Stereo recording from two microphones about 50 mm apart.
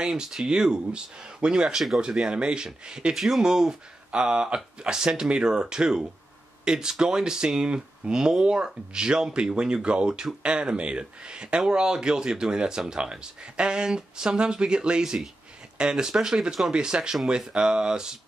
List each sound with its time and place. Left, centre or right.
0.0 s speech: centre